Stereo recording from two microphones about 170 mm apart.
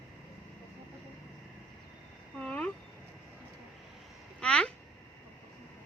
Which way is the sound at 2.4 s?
10° left (ahead or behind).